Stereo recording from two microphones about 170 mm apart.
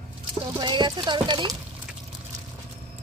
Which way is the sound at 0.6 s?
25° right (ahead or behind).